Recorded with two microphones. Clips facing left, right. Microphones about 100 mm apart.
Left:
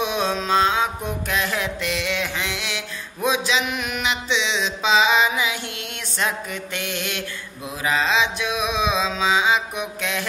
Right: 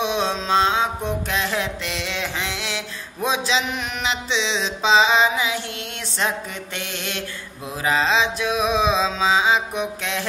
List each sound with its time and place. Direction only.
0.0 s music: 25° right (ahead or behind)
6.1 s mantra: 30° right (ahead or behind)